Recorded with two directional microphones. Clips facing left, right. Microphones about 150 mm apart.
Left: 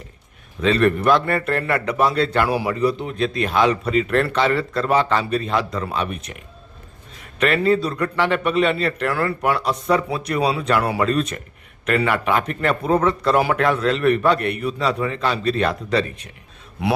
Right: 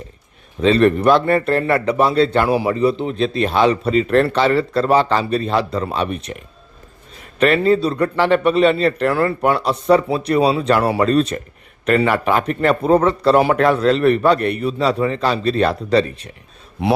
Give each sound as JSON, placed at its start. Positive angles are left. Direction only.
{"t": 0.6, "sound": "a man's voice", "side_deg": -30}
{"t": 7.3, "sound": "a man's voice", "side_deg": -30}